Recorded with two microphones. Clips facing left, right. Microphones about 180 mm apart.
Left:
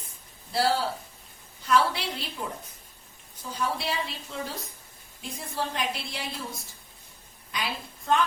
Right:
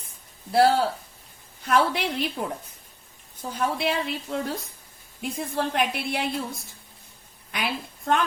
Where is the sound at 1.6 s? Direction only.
55° right (ahead or behind).